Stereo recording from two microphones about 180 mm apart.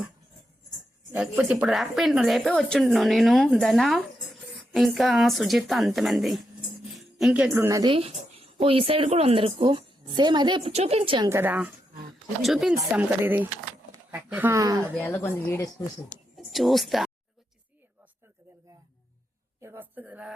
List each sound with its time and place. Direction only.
1.1 s a woman's voice: 5° right (ahead or behind)
6.9 s music: centre (ahead or behind)
7.5 s a woman's voice: 15° right (ahead or behind)
7.9 s a woman's voice: 30° right (ahead or behind)
11.3 s a woman's voice: 10° right (ahead or behind)
14.9 s speech: 10° left (ahead or behind)
16.5 s speech: centre (ahead or behind)
19.6 s a woman's voice: 15° right (ahead or behind)